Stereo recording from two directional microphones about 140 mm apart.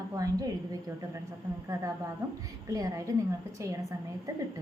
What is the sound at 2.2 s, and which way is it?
A woman's voice, 20° right (ahead or behind).